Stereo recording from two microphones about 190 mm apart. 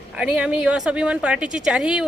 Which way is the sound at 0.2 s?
5° right (ahead or behind).